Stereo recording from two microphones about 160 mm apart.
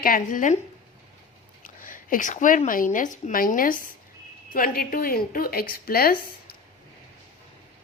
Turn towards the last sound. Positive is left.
turn(degrees=70)  # may be behind; listen again after turning